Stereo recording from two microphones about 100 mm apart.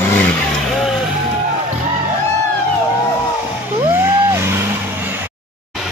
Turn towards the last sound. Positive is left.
turn(degrees=-25)  # may be behind; listen again after turning